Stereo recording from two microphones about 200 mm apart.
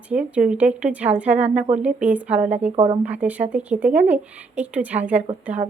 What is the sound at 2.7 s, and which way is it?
Speech, 25° right (ahead or behind).